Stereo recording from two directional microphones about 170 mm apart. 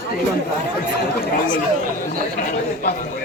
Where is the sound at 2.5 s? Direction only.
55° left (ahead or behind).